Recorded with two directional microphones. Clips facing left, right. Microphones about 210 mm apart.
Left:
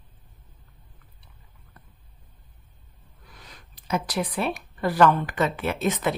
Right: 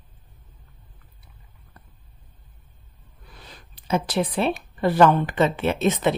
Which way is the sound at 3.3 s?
30° right (ahead or behind).